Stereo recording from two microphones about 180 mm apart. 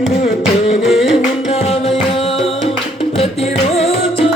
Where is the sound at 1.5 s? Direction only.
35° left (ahead or behind).